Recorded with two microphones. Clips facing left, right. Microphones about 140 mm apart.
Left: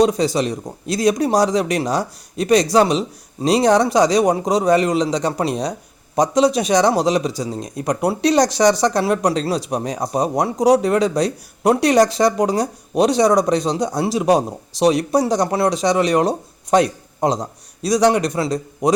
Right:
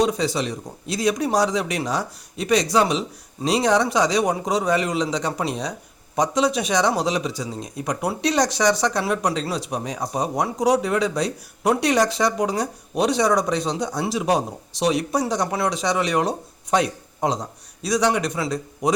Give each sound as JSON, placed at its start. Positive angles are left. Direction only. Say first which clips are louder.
{"t": 0.0, "sound": "a man's voice", "louder": "left 5 dB", "side_deg": 40}